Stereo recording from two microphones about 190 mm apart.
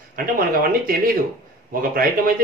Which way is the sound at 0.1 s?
50° right (ahead or behind).